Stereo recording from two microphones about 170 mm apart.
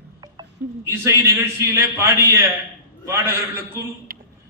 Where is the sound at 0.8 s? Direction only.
15° right (ahead or behind).